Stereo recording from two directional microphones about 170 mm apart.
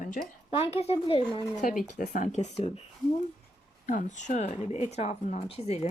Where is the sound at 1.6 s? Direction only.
50° left (ahead or behind).